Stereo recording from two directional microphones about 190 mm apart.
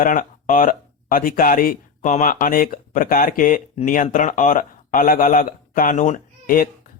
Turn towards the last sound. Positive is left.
turn(degrees=50)  # may be behind; listen again after turning